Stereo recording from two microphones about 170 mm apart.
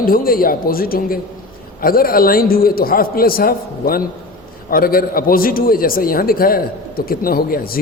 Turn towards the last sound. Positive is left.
turn(degrees=60)  # may be behind; listen again after turning